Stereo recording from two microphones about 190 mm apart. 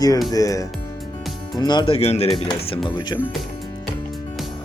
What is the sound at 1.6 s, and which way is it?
Speech, 25° left (ahead or behind).